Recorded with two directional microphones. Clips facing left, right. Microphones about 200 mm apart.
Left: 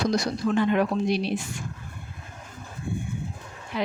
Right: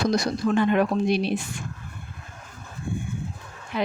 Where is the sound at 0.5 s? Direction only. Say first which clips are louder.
Right 1 dB; 55° right (ahead or behind).